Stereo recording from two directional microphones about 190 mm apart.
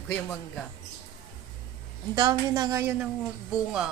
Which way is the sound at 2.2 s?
20° right (ahead or behind).